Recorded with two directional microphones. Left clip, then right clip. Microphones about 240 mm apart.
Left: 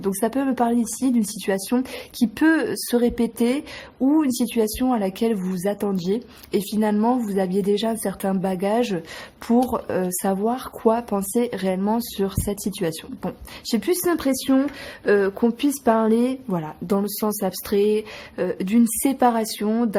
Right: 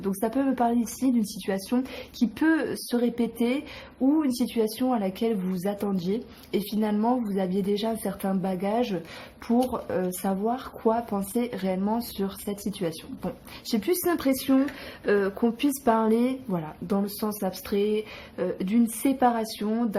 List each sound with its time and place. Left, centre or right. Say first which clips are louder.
0.0 s speech: left 4 dB; left